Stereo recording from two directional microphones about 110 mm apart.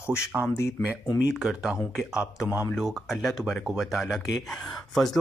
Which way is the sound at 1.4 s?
5° right (ahead or behind).